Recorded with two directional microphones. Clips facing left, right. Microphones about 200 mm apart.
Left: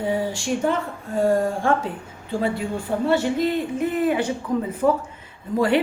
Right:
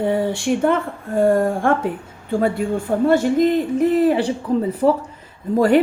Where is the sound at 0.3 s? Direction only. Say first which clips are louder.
Right 5 dB; 60° right (ahead or behind).